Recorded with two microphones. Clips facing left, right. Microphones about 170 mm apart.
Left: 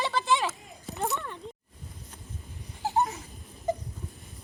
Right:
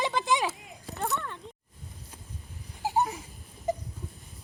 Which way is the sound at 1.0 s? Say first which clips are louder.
Left 1 dB; 15° left (ahead or behind).